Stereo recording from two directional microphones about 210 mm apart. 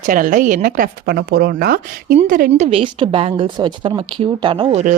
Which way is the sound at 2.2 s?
35° right (ahead or behind).